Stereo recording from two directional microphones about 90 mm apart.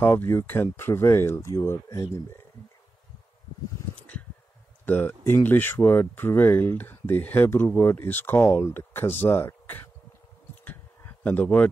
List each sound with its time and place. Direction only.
0.0 s speech: 25° left (ahead or behind)
4.8 s speech: 20° left (ahead or behind)
10.6 s a sound: 20° left (ahead or behind)